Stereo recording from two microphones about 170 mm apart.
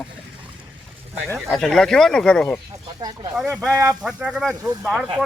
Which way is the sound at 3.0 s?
25° right (ahead or behind).